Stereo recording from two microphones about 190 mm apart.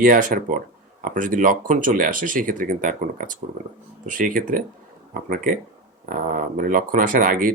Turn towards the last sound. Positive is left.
turn(degrees=-45)  # may be behind; listen again after turning